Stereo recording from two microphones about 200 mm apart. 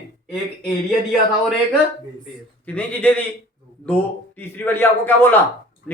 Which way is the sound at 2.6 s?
5° left (ahead or behind).